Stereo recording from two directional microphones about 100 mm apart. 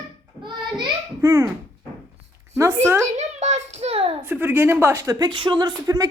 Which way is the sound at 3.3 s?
90° right.